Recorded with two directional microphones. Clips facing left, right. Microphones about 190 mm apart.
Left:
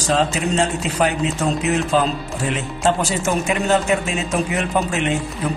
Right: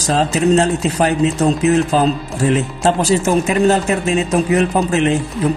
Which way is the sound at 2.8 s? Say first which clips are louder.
Right 3 dB; 35° right (ahead or behind).